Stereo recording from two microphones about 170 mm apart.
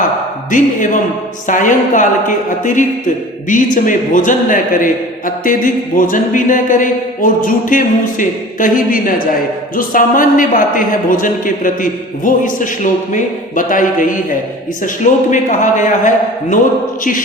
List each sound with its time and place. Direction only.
0.5 s a man's voice: 50° left (ahead or behind)